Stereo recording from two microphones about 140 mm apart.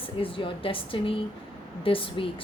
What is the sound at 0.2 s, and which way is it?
A woman's voice, 40° left (ahead or behind).